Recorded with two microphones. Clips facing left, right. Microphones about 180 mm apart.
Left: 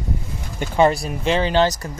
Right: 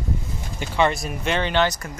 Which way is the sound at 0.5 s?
40° left (ahead or behind).